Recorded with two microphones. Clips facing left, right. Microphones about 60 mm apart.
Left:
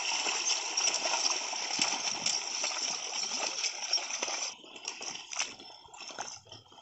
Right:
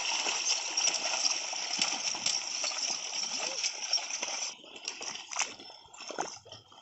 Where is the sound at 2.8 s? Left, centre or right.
Centre.